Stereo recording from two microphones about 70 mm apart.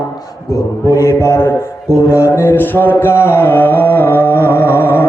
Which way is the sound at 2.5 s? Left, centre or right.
Left.